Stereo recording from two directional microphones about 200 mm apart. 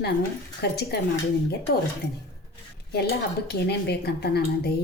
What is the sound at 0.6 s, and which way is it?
Speech, 55° left (ahead or behind).